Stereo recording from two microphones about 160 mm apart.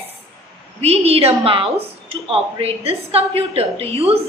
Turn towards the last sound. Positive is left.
turn(degrees=-40)  # may be behind; listen again after turning